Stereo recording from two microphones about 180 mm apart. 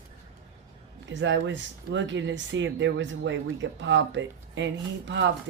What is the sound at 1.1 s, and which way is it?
Speech, 80° right.